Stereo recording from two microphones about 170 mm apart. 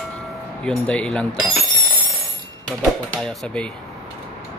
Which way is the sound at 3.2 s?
5° left (ahead or behind).